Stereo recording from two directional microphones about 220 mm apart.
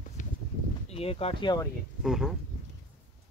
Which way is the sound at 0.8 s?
25° left (ahead or behind).